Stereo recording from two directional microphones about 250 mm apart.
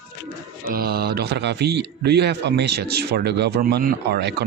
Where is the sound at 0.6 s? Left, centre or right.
Right.